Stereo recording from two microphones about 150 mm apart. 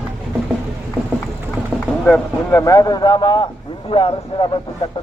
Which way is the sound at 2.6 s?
25° left (ahead or behind).